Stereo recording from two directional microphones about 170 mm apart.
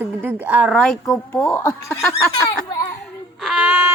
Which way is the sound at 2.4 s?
20° left (ahead or behind).